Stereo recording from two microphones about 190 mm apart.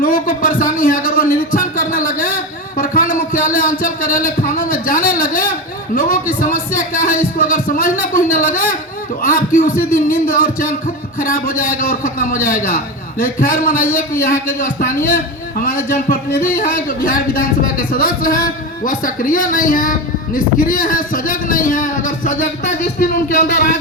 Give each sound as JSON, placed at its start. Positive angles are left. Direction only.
{"t": 0.0, "sound": "a sound", "side_deg": 45}
{"t": 5.9, "sound": "music", "side_deg": 45}
{"t": 9.2, "sound": "a man's voice", "side_deg": 45}